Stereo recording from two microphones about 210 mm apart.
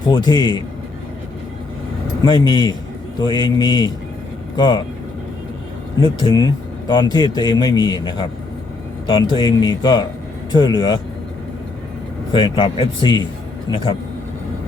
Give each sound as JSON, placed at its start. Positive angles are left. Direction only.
{"t": 0.1, "sound": "speech", "side_deg": 20}
{"t": 2.2, "sound": "speech", "side_deg": 20}
{"t": 6.0, "sound": "speech", "side_deg": 20}
{"t": 12.3, "sound": "speech", "side_deg": 20}